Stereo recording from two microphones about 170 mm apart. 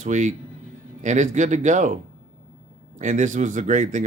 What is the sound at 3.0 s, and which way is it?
Speech, 45° right (ahead or behind).